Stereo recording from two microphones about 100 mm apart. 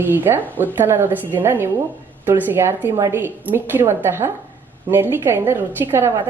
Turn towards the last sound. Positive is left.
turn(degrees=-25)  # may be behind; listen again after turning